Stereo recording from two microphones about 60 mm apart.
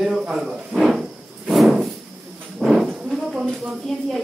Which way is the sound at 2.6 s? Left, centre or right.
Centre.